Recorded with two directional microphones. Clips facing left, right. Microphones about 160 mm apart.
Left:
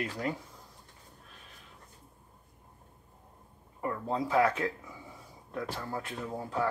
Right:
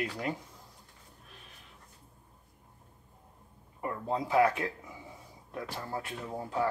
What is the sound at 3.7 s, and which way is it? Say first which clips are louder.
Speech: left 1 dB; 20° right (ahead or behind).